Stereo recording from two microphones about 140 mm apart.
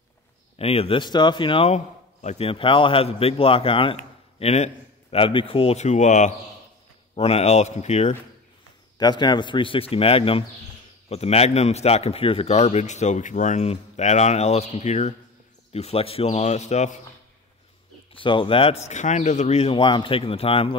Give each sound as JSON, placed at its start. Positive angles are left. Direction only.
{"t": 0.6, "sound": "a man's voice", "side_deg": 45}
{"t": 7.2, "sound": "a man's voice", "side_deg": 45}
{"t": 8.9, "sound": "a man's voice", "side_deg": 30}
{"t": 18.1, "sound": "a man's voice", "side_deg": 35}